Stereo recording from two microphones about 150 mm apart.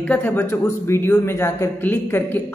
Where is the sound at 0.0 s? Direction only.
10° left (ahead or behind).